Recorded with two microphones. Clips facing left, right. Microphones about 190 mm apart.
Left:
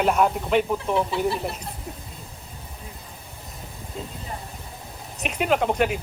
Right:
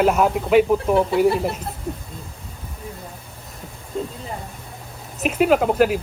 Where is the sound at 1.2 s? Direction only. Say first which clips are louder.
Right 7 dB; 55° right (ahead or behind).